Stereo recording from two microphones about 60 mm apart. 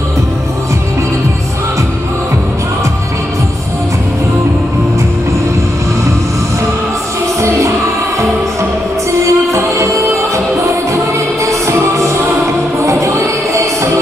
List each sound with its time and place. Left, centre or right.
9.2 s music: right